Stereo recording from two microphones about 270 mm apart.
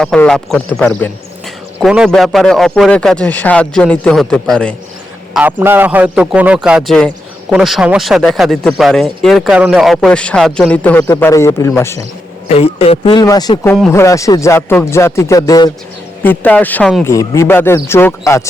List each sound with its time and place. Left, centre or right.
0.0 s speech: centre
12.5 s speech: left